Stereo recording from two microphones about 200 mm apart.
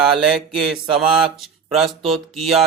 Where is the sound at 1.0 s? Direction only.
5° right (ahead or behind).